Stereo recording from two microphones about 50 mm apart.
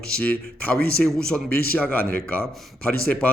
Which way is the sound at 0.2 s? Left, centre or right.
Left.